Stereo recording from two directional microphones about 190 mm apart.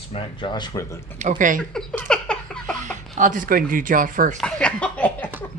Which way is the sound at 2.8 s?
40° right (ahead or behind).